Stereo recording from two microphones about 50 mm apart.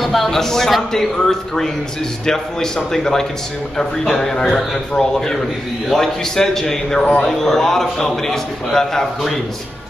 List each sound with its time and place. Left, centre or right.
0.0 s a man's voice: centre